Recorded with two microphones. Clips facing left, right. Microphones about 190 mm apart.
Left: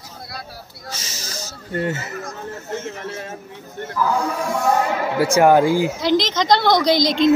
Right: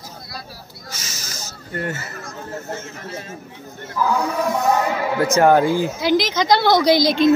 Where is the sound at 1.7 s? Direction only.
20° left (ahead or behind).